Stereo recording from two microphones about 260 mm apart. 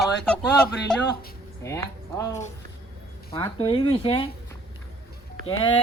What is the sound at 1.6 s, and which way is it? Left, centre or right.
Speech, centre.